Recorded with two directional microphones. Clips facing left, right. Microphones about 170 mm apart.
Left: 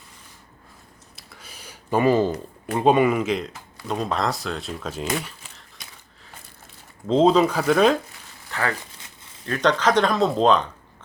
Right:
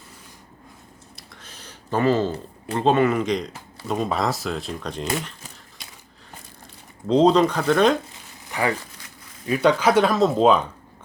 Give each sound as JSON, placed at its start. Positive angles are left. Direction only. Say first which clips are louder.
{"t": 1.1, "sound": "a sound", "louder": "left 1 dB", "side_deg": 5}
{"t": 2.6, "sound": "speech", "louder": "left 1 dB", "side_deg": 10}
{"t": 7.1, "sound": "speech", "louder": "right 1 dB", "side_deg": 0}
{"t": 8.4, "sound": "a sound", "louder": "right 3 dB", "side_deg": -15}
{"t": 8.8, "sound": "crumpling", "louder": "right 1 dB", "side_deg": 25}
{"t": 9.5, "sound": "speech", "louder": "right 2 dB", "side_deg": -10}